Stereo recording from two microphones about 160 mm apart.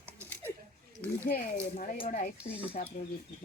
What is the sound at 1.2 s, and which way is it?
Speech, 55° left (ahead or behind).